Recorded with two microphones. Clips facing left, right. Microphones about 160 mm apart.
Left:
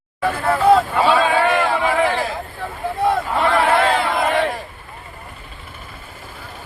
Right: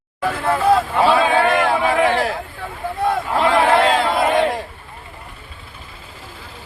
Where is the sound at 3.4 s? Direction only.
10° right (ahead or behind).